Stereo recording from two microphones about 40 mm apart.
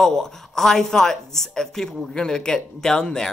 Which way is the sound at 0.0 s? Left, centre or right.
Centre.